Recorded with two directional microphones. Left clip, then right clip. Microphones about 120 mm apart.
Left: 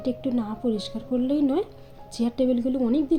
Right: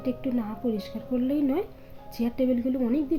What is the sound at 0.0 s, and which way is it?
A woman's voice, 35° left (ahead or behind).